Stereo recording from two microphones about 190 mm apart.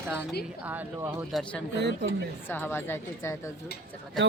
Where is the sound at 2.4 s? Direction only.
10° left (ahead or behind).